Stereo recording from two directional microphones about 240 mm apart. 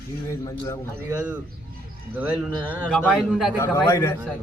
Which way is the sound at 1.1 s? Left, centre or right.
Centre.